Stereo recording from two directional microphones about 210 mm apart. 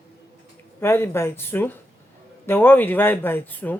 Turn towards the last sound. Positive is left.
turn(degrees=10)  # may be behind; listen again after turning